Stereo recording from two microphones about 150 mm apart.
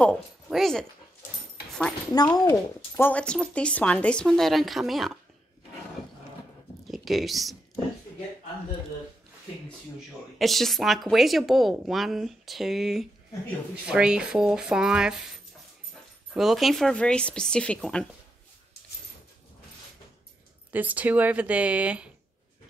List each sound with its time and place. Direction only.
0.0 s speech: centre (ahead or behind)
2.1 s speech: 25° left (ahead or behind); by 5.2 s centre (ahead or behind)
6.9 s speech: centre (ahead or behind)
9.9 s speech: centre (ahead or behind)
16.3 s speech: centre (ahead or behind)
20.7 s speech: 10° right (ahead or behind)